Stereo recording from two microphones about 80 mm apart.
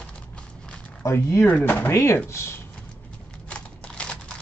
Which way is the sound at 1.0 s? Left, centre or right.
Left.